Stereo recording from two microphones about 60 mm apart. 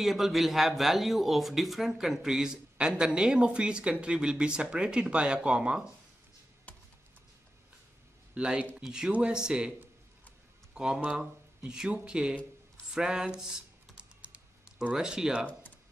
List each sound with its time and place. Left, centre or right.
0.0 s speech: centre
8.4 s speech: centre
10.7 s a sound: centre
11.1 s speech: centre